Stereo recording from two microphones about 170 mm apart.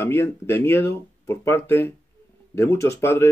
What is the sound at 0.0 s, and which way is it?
Speech, 15° left (ahead or behind).